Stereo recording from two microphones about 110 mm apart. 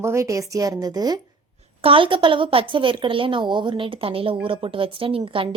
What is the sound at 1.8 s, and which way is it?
A woman's voice, 50° right (ahead or behind).